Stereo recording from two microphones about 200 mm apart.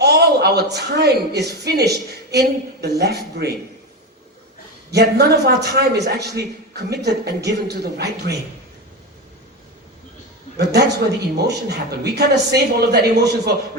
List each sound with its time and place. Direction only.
0.0 s a woman's voice: 55° right (ahead or behind)
4.9 s a man's voice: 55° right (ahead or behind)
10.6 s a man's voice: 55° right (ahead or behind)